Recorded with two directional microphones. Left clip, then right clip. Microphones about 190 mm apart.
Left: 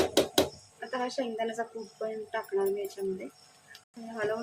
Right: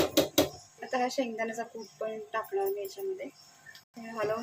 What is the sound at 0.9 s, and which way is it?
A woman's voice, centre (ahead or behind).